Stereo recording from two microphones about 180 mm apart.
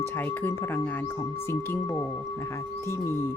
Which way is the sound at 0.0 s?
10° left (ahead or behind).